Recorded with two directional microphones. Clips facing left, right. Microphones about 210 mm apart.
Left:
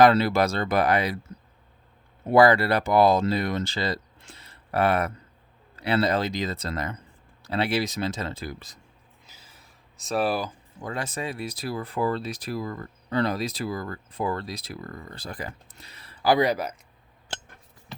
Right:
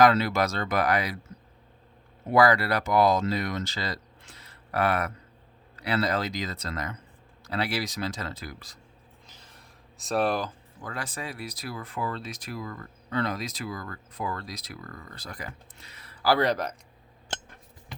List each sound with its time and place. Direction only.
0.0 s speech: 30° left (ahead or behind)
2.3 s speech: 30° left (ahead or behind)
9.2 s a sound: 5° left (ahead or behind)
10.8 s speech: 25° left (ahead or behind); by 16.7 s 10° left (ahead or behind)